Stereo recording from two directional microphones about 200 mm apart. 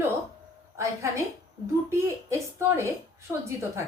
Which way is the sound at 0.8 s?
15° right (ahead or behind).